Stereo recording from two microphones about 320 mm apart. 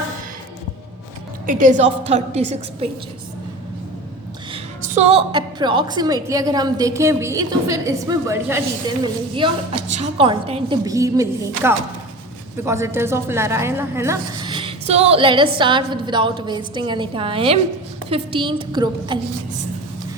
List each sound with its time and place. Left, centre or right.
1.5 s a woman's voice: right
4.5 s speech: centre